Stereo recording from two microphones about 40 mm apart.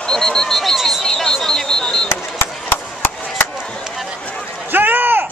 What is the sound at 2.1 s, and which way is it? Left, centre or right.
Chop, left.